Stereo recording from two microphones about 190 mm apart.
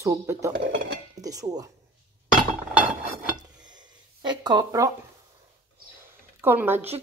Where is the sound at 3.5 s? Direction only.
20° right (ahead or behind).